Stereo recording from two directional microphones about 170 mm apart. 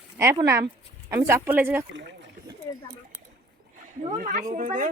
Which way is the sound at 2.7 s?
20° left (ahead or behind).